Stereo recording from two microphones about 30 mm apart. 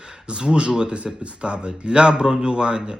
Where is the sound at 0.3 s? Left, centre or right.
Right.